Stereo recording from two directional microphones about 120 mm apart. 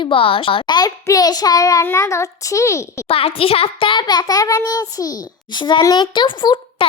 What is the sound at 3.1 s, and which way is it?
A child's voice, 55° left (ahead or behind).